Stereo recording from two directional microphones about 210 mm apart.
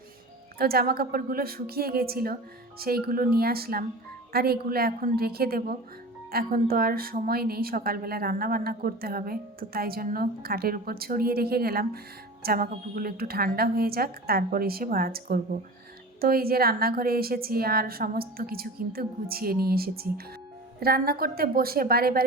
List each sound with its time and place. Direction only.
0.6 s a woman's voice: 45° right (ahead or behind)